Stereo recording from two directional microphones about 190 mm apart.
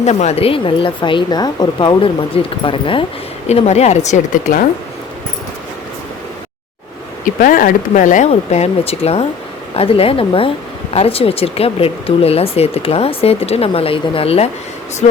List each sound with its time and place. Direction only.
0.0 s a woman's voice: 35° left (ahead or behind)
7.3 s a woman's voice: 45° left (ahead or behind)